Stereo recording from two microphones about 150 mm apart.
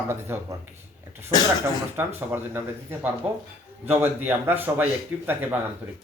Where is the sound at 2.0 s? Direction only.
15° right (ahead or behind).